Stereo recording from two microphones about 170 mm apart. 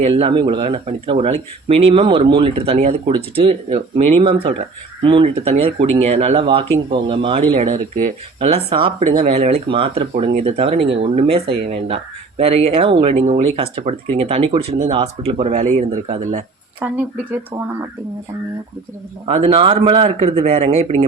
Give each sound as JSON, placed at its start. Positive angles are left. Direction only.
{"t": 0.0, "sound": "speech", "side_deg": -35}
{"t": 7.5, "sound": "speech", "side_deg": -50}
{"t": 8.4, "sound": "speech", "side_deg": -35}
{"t": 9.0, "sound": "speech", "side_deg": -50}
{"t": 9.3, "sound": "speech", "side_deg": -35}
{"t": 16.8, "sound": "speech", "side_deg": -10}
{"t": 19.2, "sound": "speech", "side_deg": -40}